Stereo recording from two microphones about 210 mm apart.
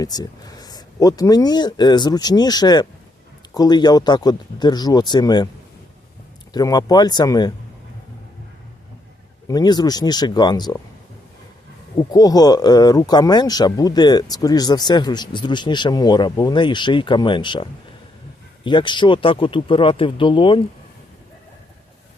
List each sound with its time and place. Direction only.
0.0 s speech: 20° left (ahead or behind)
6.5 s speech: 20° left (ahead or behind)
9.5 s speech: 20° left (ahead or behind)
11.9 s speech: 15° left (ahead or behind)